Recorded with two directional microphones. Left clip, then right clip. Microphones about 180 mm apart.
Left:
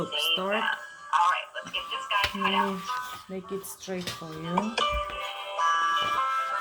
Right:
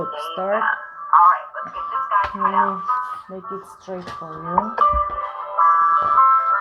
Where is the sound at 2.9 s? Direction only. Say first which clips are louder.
Right 11 dB; 45° left (ahead or behind).